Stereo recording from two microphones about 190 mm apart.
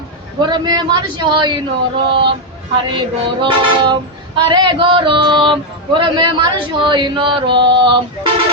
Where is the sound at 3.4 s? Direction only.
25° right (ahead or behind).